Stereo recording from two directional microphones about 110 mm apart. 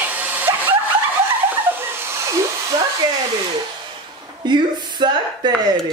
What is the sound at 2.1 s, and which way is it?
Hair dryer, 25° right (ahead or behind).